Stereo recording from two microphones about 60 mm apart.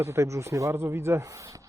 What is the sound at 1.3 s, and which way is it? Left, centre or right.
Speech, right.